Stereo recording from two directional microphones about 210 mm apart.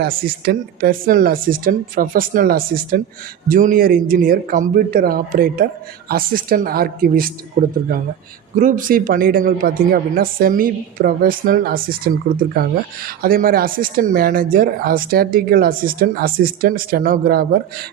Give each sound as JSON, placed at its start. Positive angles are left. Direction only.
{"t": 0.0, "sound": "speech", "side_deg": -45}